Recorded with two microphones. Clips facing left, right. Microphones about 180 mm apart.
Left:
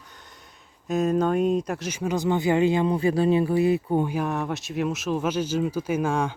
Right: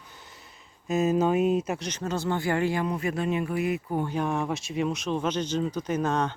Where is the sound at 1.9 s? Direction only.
10° left (ahead or behind); by 4.0 s 30° left (ahead or behind).